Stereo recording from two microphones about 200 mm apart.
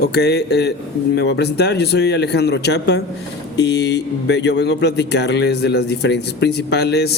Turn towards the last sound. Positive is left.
turn(degrees=55)  # may be behind; listen again after turning